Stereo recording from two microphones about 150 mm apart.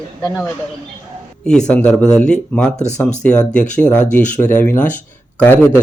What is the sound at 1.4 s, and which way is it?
Speech, 5° left (ahead or behind).